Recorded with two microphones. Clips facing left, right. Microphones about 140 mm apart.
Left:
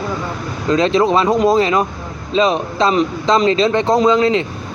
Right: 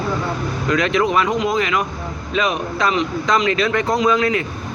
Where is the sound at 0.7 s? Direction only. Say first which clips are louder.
Left 4 dB; 30° left (ahead or behind).